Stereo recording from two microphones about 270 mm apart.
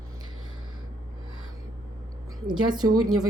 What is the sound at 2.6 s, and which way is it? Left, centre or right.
Speech, centre.